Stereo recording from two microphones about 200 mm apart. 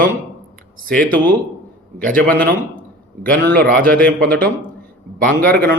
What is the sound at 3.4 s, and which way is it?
Speech, 50° right (ahead or behind).